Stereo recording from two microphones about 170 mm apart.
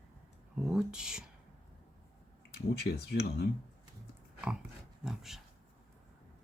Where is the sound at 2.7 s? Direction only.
75° left (ahead or behind).